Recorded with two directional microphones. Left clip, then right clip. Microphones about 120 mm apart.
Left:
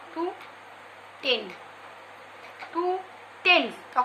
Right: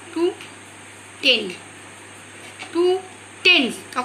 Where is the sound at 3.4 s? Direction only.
75° left (ahead or behind).